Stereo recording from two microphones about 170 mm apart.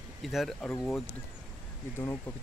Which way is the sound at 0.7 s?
15° left (ahead or behind).